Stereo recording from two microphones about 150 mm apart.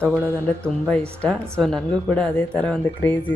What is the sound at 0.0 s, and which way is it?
A woman's voice, 5° left (ahead or behind).